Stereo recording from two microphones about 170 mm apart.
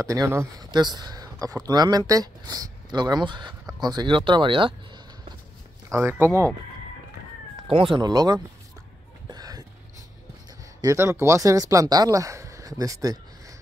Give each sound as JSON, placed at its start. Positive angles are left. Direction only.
{"t": 0.0, "sound": "speech", "side_deg": -15}
{"t": 5.9, "sound": "speech", "side_deg": -15}
{"t": 7.7, "sound": "speech", "side_deg": -30}
{"t": 9.3, "sound": "a sound", "side_deg": -20}
{"t": 10.8, "sound": "speech", "side_deg": -20}